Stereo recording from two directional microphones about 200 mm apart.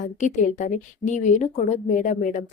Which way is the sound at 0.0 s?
40° left (ahead or behind).